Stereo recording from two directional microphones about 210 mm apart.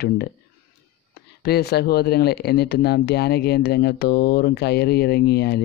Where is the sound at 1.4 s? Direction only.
50° left (ahead or behind).